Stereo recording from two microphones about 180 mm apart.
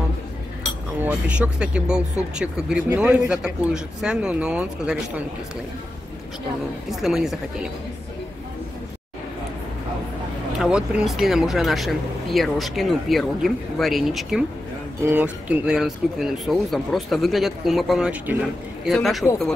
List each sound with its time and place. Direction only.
1.0 s speech: 5° right (ahead or behind)
6.9 s speech: centre (ahead or behind)
10.6 s speech: 5° right (ahead or behind)